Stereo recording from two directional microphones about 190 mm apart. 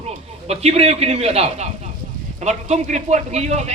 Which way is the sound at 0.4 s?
35° right (ahead or behind).